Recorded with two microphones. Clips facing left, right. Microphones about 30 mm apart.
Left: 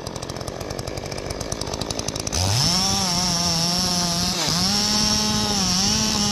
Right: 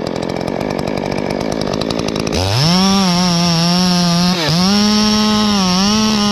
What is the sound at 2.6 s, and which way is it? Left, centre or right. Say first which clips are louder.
Chainsaw: right 13 dB; right.